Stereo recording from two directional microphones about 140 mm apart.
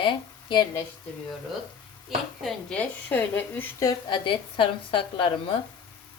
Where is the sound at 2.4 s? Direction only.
5° left (ahead or behind).